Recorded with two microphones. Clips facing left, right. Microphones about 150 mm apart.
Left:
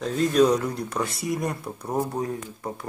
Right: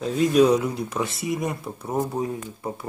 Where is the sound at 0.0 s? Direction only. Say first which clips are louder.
Right 2 dB; 10° right (ahead or behind).